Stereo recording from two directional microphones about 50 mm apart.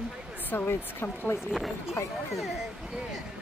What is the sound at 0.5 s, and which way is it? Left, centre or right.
Speech, left.